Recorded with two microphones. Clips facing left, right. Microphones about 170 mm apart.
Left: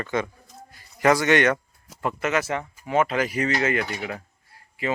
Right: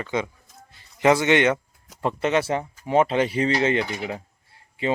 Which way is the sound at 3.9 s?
15° right (ahead or behind).